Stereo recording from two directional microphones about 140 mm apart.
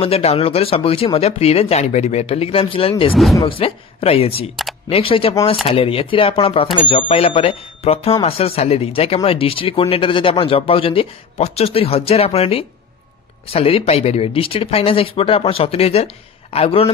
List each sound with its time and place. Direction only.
0.0 s speech: 45° left (ahead or behind)